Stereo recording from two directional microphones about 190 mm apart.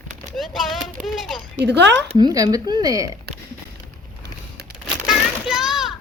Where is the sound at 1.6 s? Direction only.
65° right (ahead or behind).